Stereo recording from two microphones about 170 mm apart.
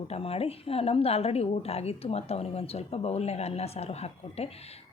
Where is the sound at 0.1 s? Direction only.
35° left (ahead or behind).